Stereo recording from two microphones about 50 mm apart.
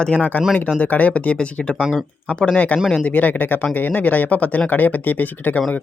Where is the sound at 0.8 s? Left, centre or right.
Left.